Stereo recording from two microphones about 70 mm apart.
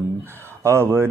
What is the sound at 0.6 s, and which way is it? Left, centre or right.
Speech, right.